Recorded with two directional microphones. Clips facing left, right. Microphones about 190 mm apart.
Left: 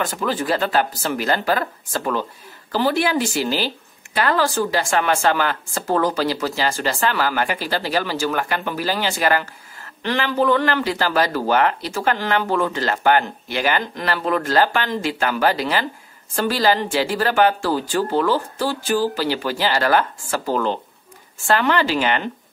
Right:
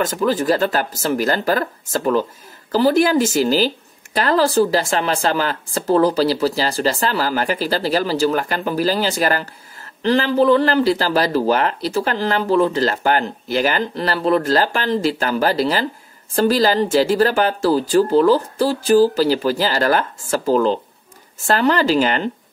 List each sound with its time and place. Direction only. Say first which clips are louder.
0.0 s a woman's voice: right 5 dB; 40° right (ahead or behind)